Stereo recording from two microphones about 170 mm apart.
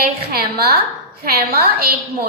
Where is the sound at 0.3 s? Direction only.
65° right (ahead or behind).